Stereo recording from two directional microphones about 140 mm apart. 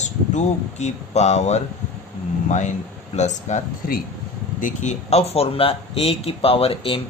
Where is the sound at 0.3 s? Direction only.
55° left (ahead or behind).